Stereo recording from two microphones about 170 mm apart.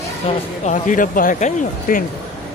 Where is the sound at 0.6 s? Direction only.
50° left (ahead or behind).